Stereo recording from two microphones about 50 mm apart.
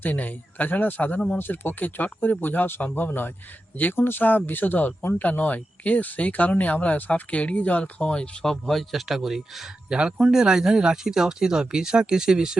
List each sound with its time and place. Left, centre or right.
0.0 s speech: left
8.4 s speech: centre
9.9 s speech: centre